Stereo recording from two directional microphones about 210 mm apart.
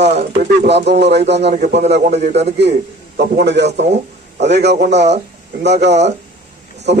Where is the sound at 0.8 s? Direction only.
55° right (ahead or behind).